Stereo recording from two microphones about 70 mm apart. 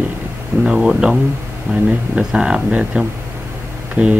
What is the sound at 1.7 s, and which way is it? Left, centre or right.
Speech, right.